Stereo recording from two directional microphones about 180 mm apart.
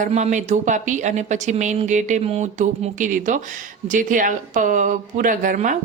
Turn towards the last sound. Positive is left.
turn(degrees=-45)  # may be behind; listen again after turning